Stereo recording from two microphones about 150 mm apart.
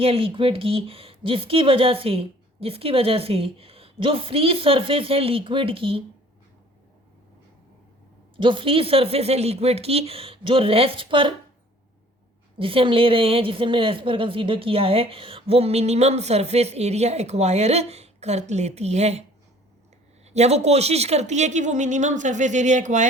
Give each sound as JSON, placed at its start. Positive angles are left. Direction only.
{"t": 0.0, "sound": "speech", "side_deg": -40}
{"t": 8.4, "sound": "speech", "side_deg": -35}
{"t": 12.5, "sound": "a woman's voice", "side_deg": -35}
{"t": 20.3, "sound": "a woman's voice", "side_deg": -45}